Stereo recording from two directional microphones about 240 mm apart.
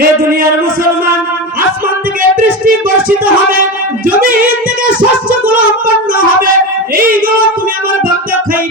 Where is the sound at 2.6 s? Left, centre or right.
Right.